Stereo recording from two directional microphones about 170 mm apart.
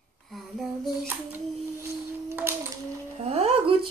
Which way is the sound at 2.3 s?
15° right (ahead or behind).